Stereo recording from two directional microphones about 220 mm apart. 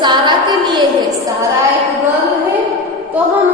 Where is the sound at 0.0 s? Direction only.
20° right (ahead or behind).